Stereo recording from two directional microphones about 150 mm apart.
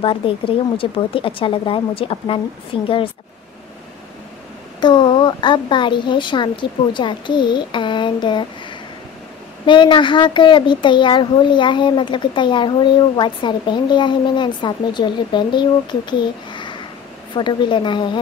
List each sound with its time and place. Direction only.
0.0 s a child's voice: 35° left (ahead or behind)
4.7 s a child's voice: 30° left (ahead or behind)